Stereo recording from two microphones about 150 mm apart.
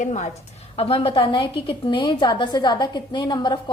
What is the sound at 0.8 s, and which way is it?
A woman's voice, 40° left (ahead or behind).